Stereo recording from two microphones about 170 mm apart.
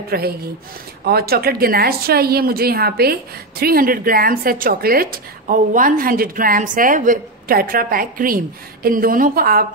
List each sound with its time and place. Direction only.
0.1 s a woman's voice: 65° right (ahead or behind)